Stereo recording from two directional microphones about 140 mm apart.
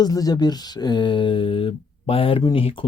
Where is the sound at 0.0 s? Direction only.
25° left (ahead or behind).